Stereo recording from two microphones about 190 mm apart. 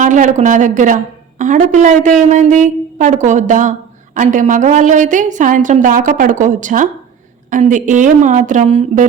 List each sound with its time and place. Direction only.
0.0 s a woman's voice: 40° right (ahead or behind)